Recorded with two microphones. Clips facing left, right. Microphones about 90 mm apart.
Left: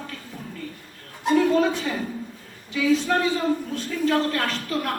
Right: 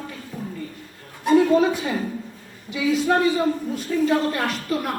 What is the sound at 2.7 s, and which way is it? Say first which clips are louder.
A man's voice: right 1 dB; 15° right (ahead or behind).